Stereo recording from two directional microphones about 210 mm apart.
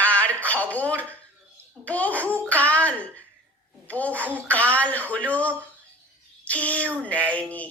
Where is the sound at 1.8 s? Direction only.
5° left (ahead or behind).